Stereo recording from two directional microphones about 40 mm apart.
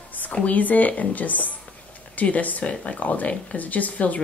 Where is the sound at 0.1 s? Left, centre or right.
Left.